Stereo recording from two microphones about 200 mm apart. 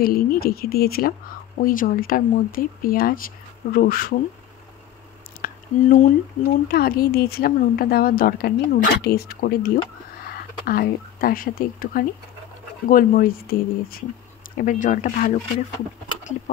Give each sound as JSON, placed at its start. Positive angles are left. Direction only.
{"t": 0.0, "sound": "speech", "side_deg": 45}
{"t": 5.4, "sound": "speech", "side_deg": 45}